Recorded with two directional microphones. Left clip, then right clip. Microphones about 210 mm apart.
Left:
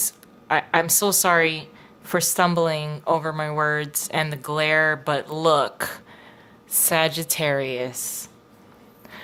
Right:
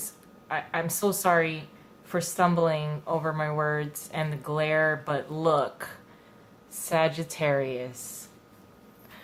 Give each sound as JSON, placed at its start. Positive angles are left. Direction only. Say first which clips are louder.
{"t": 0.4, "sound": "speech", "louder": "left 10 dB", "side_deg": 45}